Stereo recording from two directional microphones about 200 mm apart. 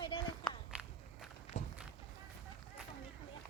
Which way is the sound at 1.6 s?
35° left (ahead or behind).